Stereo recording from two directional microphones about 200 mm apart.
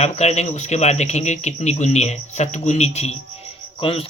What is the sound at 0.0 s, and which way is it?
Speech, 30° left (ahead or behind).